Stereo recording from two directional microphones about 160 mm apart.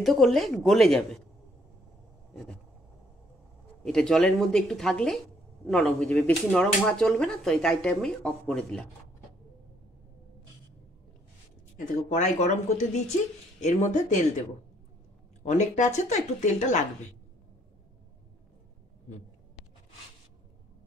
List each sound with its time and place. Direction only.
0.0 s speech: centre (ahead or behind)
3.8 s speech: 5° left (ahead or behind)
11.7 s speech: 50° left (ahead or behind)
15.4 s speech: 50° left (ahead or behind)